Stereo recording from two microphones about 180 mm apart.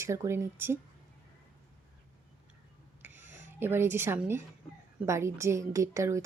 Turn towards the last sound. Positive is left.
turn(degrees=-15)  # may be behind; listen again after turning